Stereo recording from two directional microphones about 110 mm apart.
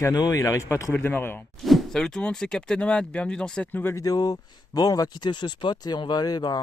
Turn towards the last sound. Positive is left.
turn(degrees=40)  # may be behind; listen again after turning